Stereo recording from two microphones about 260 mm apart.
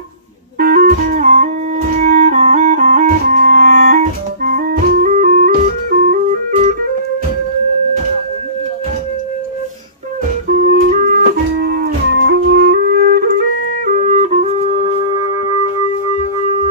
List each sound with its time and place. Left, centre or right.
0.6 s music: right
10.7 s music: right; by 15.5 s centre